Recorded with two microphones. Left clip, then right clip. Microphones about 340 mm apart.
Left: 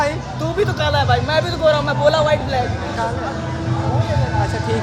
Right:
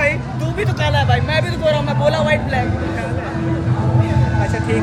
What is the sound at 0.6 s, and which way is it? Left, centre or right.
Speech, centre.